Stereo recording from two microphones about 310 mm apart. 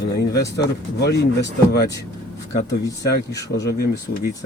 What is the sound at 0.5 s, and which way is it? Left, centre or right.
Speech, left.